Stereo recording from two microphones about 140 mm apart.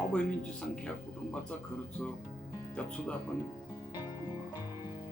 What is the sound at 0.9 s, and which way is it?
Speech, 5° left (ahead or behind).